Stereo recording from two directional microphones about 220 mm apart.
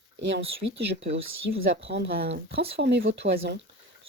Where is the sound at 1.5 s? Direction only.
45° right (ahead or behind).